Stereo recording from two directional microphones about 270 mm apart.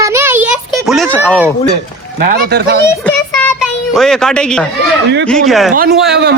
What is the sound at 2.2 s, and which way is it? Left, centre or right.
Speech, right.